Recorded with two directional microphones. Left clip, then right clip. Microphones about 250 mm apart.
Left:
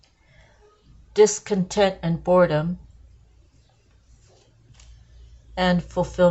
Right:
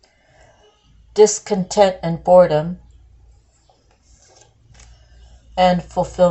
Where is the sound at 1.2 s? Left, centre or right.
Left.